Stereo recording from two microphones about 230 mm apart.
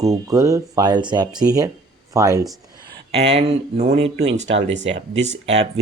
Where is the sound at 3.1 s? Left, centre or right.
Right.